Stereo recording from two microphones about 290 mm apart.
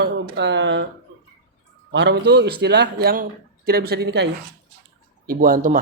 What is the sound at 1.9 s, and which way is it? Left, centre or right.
A man's voice, right.